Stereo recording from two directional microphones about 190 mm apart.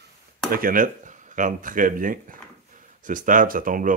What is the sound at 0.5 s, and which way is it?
Speech, 50° right (ahead or behind).